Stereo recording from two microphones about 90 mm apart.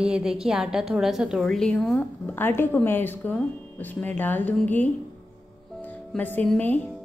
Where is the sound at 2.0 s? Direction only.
20° left (ahead or behind).